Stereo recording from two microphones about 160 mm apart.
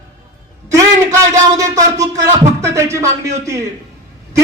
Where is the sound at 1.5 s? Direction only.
20° right (ahead or behind).